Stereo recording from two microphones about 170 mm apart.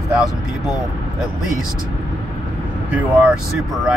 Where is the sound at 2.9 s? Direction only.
5° right (ahead or behind).